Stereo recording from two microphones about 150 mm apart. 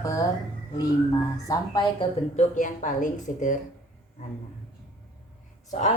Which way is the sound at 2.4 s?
55° left (ahead or behind).